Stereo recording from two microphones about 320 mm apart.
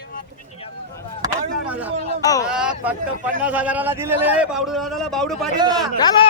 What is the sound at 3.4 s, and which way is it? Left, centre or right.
Speech, centre.